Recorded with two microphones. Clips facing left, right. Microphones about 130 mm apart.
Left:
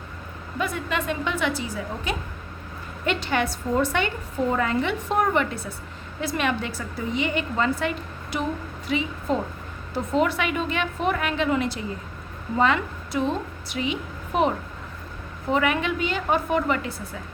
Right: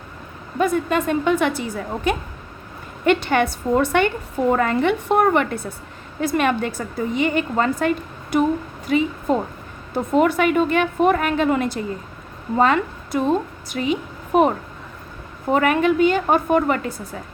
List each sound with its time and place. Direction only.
0.6 s a woman's voice: 45° right (ahead or behind)
15.5 s a woman's voice: 45° right (ahead or behind)